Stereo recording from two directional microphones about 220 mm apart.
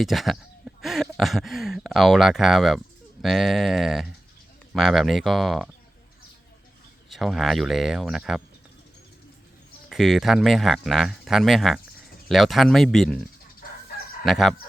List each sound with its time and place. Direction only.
0.0 s speech: centre (ahead or behind)
7.1 s speech: centre (ahead or behind)
9.9 s speech: centre (ahead or behind)
14.3 s speech: centre (ahead or behind)